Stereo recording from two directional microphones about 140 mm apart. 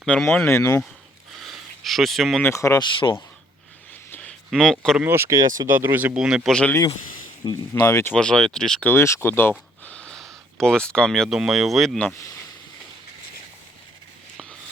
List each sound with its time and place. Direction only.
0.2 s speech: 15° left (ahead or behind)
1.5 s a sound: centre (ahead or behind)
2.4 s speech: 20° left (ahead or behind)
2.8 s speech: 35° left (ahead or behind)
4.1 s a sound: 10° left (ahead or behind)
4.9 s speech: 15° right (ahead or behind); by 6.7 s 5° left (ahead or behind)
7.4 s speech: 25° left (ahead or behind)
8.1 s speech: 5° left (ahead or behind)
8.9 s speech: 20° left (ahead or behind); by 11.9 s centre (ahead or behind)